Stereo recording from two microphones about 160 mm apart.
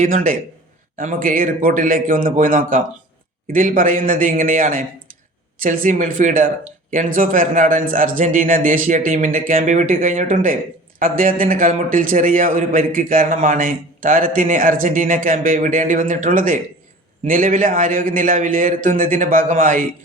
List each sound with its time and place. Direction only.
0.0 s a man's voice: 60° right (ahead or behind)